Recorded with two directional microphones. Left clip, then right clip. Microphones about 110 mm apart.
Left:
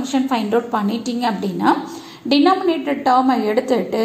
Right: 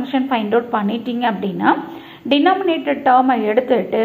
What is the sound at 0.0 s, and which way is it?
A woman's voice, 30° left (ahead or behind).